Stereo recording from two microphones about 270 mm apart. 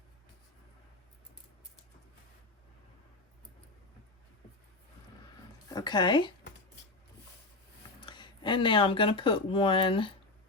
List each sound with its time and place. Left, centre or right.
5.6 s speech: centre
8.0 s speech: centre